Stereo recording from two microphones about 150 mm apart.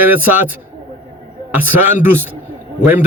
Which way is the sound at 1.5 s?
15° right (ahead or behind).